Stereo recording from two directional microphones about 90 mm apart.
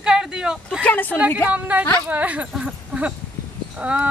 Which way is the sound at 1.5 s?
15° right (ahead or behind).